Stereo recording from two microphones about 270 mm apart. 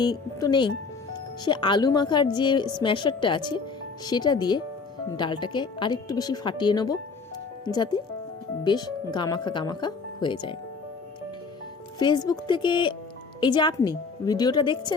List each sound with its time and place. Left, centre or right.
0.0 s a woman's voice: centre
11.9 s a woman's voice: centre